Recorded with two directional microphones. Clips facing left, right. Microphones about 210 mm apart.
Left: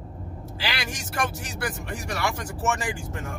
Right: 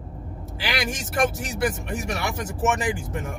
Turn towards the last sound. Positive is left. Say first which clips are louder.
# right 4 dB
turn(degrees=-20)  # may be behind; listen again after turning